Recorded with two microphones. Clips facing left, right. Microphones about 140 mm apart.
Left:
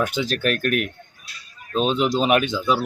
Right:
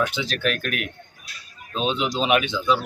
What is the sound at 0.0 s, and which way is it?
Speech, 45° left (ahead or behind).